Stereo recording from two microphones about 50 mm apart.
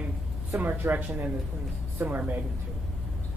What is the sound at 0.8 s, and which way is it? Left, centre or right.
Speech, right.